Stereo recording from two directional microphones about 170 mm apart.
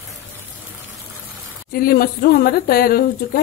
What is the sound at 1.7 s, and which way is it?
Speech, 60° left (ahead or behind).